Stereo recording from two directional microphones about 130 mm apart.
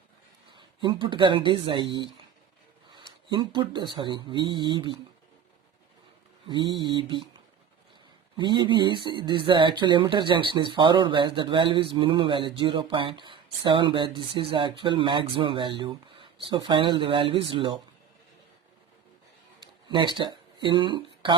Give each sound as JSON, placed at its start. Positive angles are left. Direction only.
{"t": 0.5, "sound": "speech", "side_deg": -40}
{"t": 6.5, "sound": "speech", "side_deg": -40}
{"t": 19.9, "sound": "speech", "side_deg": -40}